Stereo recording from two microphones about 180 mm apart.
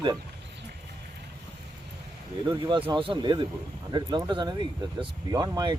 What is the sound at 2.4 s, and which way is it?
Speech, 25° right (ahead or behind).